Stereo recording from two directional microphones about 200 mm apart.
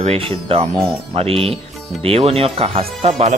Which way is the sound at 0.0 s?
30° right (ahead or behind).